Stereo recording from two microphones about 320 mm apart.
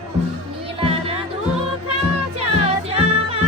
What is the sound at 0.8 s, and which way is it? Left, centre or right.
Music, centre.